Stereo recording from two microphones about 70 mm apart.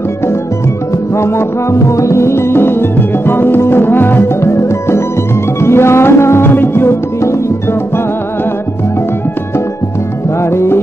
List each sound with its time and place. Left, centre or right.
1.1 s music: left
10.4 s music: left